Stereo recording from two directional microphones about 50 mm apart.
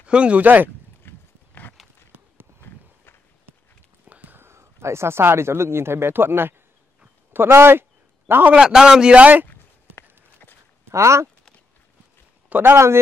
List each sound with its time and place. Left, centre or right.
0.0 s speech: right
1.0 s horse: left
2.1 s run: right
4.0 s a sound: right
4.4 s speech: right
8.3 s a man's voice: right
8.5 s a man's voice: centre
9.1 s speech: right
10.9 s speech: right
12.4 s a sound: right
12.7 s speech: right